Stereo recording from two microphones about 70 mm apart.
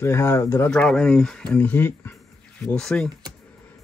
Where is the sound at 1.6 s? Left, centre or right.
Left.